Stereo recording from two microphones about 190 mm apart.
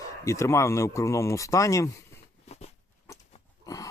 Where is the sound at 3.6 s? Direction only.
20° left (ahead or behind).